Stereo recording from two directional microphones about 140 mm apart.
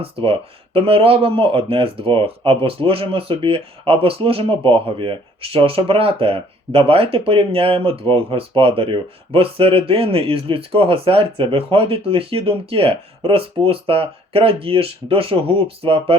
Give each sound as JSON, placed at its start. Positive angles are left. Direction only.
{"t": 0.0, "sound": "speech", "side_deg": -40}